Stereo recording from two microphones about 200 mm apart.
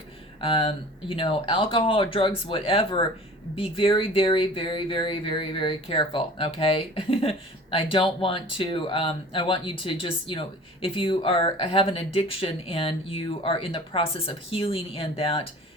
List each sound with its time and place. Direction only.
0.4 s speech: 25° left (ahead or behind)